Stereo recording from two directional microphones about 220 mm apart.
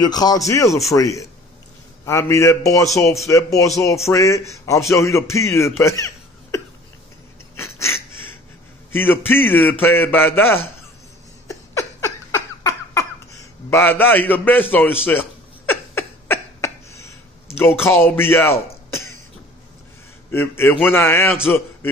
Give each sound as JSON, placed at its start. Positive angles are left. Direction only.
{"t": 0.0, "sound": "a man's voice", "side_deg": 20}
{"t": 5.8, "sound": "laughter", "side_deg": 15}
{"t": 7.5, "sound": "a sound", "side_deg": 10}
{"t": 8.9, "sound": "a man's voice", "side_deg": 10}
{"t": 11.4, "sound": "laughter", "side_deg": 15}
{"t": 13.7, "sound": "a man's voice", "side_deg": 10}
{"t": 15.6, "sound": "a sound", "side_deg": 10}
{"t": 17.6, "sound": "a man's voice", "side_deg": 10}
{"t": 20.2, "sound": "a man's voice", "side_deg": 10}